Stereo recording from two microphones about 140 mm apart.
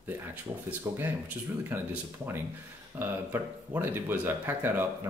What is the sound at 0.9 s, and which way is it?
Speech, 20° right (ahead or behind).